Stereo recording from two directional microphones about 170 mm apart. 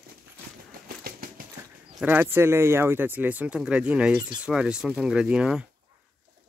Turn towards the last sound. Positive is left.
turn(degrees=-5)  # may be behind; listen again after turning